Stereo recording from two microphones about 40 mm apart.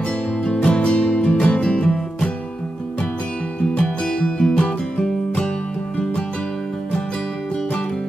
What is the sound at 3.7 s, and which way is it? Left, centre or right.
Music, left.